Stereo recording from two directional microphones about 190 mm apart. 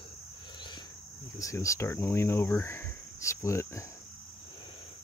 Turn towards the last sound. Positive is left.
turn(degrees=15)  # may be behind; listen again after turning